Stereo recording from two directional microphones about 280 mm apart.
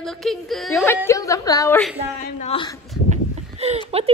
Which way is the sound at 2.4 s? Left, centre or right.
Centre.